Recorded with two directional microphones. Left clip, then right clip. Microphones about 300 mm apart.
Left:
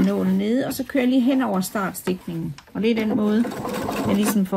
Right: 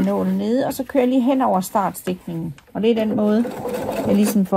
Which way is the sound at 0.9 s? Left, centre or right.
Centre.